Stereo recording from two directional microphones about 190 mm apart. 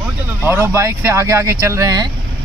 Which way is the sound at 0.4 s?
10° right (ahead or behind).